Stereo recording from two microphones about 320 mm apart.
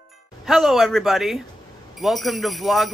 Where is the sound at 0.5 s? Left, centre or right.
Centre.